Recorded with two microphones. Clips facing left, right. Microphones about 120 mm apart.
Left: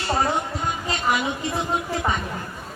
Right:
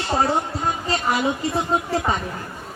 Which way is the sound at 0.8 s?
35° right (ahead or behind).